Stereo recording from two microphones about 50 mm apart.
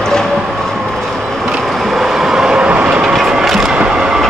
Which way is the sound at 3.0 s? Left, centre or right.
Centre.